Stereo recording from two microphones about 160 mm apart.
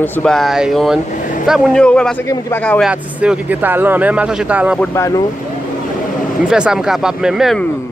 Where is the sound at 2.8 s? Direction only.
5° right (ahead or behind).